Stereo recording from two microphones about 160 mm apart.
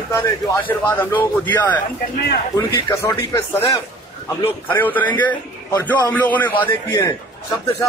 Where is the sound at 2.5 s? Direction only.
20° left (ahead or behind).